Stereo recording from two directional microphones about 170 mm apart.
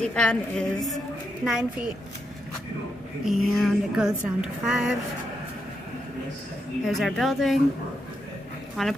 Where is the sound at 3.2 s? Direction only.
Centre (ahead or behind).